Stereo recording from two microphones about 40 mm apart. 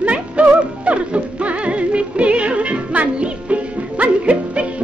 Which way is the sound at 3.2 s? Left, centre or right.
Right.